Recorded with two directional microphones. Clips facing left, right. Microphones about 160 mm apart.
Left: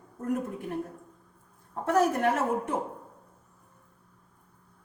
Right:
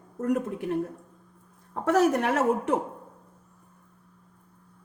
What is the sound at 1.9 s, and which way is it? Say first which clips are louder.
Speech: right 2 dB; 80° right.